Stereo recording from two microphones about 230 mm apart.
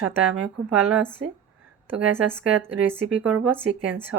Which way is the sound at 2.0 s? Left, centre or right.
Centre.